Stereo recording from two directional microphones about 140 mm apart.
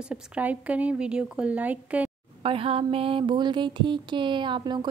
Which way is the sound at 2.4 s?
40° right (ahead or behind).